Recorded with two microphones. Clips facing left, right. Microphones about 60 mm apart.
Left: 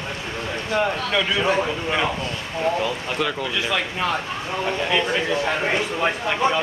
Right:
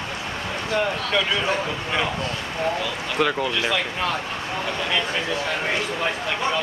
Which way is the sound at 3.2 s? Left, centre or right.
Centre.